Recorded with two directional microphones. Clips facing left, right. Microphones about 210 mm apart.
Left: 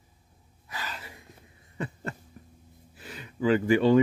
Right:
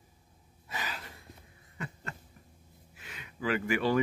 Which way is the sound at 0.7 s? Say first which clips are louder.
Even; 20° right (ahead or behind).